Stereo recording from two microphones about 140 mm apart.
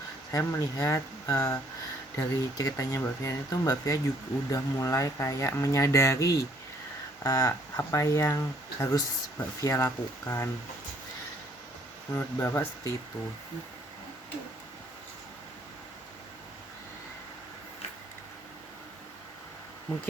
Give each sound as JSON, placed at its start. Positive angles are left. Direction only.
{"t": 0.3, "sound": "speech", "side_deg": 25}
{"t": 12.1, "sound": "speech", "side_deg": 20}